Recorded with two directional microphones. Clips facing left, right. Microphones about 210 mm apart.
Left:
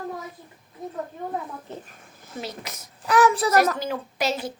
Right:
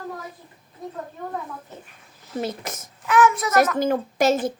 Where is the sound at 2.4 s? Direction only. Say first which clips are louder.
Right 6 dB; 50° right (ahead or behind).